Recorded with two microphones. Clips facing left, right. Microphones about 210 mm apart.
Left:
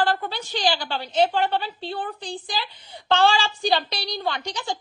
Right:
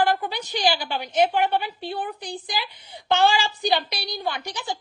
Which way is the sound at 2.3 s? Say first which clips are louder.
Even; 20° right (ahead or behind).